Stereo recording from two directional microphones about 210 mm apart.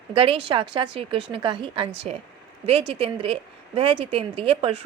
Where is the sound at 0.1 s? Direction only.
25° right (ahead or behind).